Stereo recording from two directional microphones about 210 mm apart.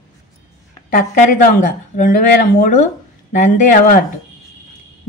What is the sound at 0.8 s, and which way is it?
Speech, 40° left (ahead or behind).